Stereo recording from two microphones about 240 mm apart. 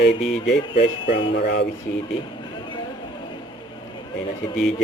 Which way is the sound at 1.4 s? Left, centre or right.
Left.